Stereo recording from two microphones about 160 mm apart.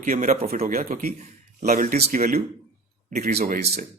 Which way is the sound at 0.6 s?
60° right (ahead or behind).